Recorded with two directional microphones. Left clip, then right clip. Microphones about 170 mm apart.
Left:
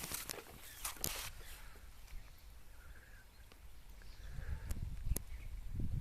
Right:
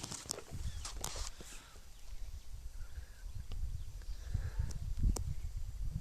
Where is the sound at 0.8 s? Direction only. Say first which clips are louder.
Left 1 dB; 60° left (ahead or behind).